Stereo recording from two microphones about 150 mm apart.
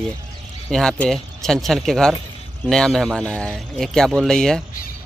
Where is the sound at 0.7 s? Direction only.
5° left (ahead or behind).